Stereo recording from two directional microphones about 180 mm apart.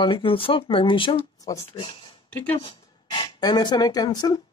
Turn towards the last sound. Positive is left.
turn(degrees=25)  # may be behind; listen again after turning